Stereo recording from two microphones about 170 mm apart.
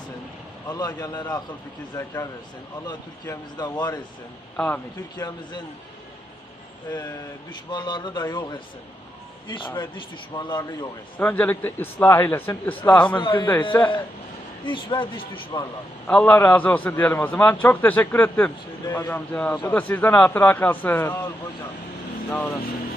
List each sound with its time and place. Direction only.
0.7 s a man's voice: 20° left (ahead or behind)
4.5 s a man's voice: 5° left (ahead or behind)
5.1 s speech: 25° left (ahead or behind)
7.7 s speech: 25° left (ahead or behind)
11.2 s a man's voice: 10° left (ahead or behind)
13.1 s speech: 30° left (ahead or behind)
14.6 s speech: 30° left (ahead or behind)
16.0 s a man's voice: 10° left (ahead or behind)
22.3 s a man's voice: 10° left (ahead or behind)